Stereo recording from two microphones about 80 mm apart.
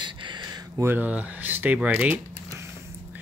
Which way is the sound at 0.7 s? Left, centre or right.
Right.